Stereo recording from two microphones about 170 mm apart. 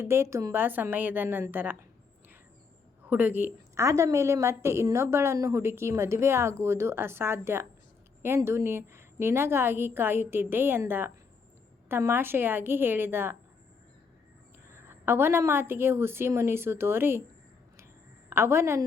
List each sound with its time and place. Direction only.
0.0 s a woman's voice: 15° right (ahead or behind)
3.1 s a woman's voice: 10° right (ahead or behind)
14.8 s a woman's voice: 15° right (ahead or behind)
18.3 s a woman's voice: 15° right (ahead or behind)